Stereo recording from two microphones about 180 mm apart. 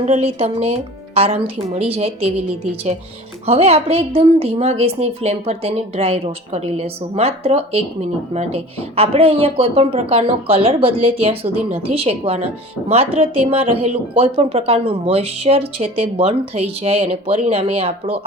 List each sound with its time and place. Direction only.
0.0 s speech: 40° right (ahead or behind)
3.4 s speech: 35° right (ahead or behind)